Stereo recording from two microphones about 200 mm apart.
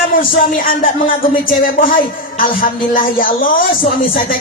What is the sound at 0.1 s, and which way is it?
Speech, 45° left (ahead or behind).